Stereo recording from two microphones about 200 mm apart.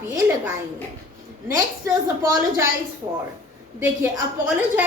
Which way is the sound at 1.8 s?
15° right (ahead or behind).